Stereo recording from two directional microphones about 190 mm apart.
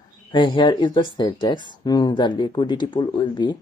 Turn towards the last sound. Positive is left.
turn(degrees=25)  # may be behind; listen again after turning